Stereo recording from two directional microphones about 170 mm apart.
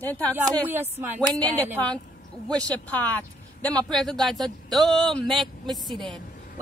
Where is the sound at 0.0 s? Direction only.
10° left (ahead or behind).